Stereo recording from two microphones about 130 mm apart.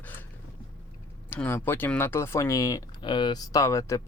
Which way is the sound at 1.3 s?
15° left (ahead or behind).